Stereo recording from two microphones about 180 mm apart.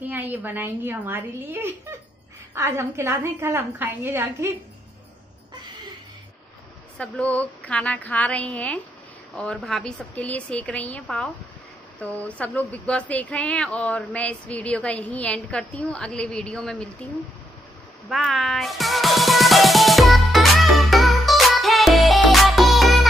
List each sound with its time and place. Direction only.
0.1 s a woman's voice: 10° right (ahead or behind)
7.0 s speech: 5° left (ahead or behind)
18.1 s music: centre (ahead or behind)